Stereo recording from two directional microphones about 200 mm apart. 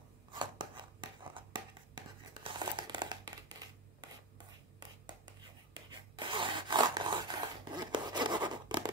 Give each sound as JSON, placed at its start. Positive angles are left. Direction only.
{"t": 0.3, "sound": "scissors", "side_deg": -20}
{"t": 5.9, "sound": "zipper", "side_deg": -25}